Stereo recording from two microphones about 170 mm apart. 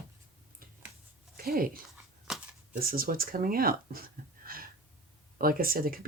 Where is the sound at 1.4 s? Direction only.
60° right (ahead or behind).